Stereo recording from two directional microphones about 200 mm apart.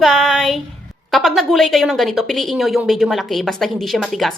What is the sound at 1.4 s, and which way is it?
A woman's voice, centre (ahead or behind).